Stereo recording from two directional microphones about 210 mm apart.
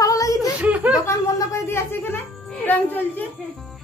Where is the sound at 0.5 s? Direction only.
5° right (ahead or behind).